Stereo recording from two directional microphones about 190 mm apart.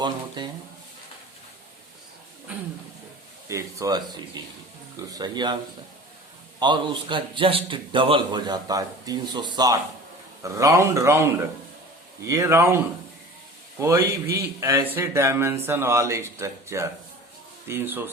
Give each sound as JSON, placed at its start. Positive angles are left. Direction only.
{"t": 0.4, "sound": "a man's voice", "side_deg": -25}
{"t": 3.5, "sound": "a man's voice", "side_deg": -15}
{"t": 6.6, "sound": "a man's voice", "side_deg": -25}